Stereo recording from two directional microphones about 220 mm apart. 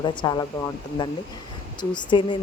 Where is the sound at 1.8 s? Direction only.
20° left (ahead or behind).